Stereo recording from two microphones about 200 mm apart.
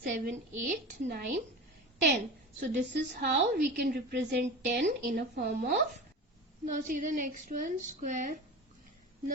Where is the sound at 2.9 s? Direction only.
55° right (ahead or behind).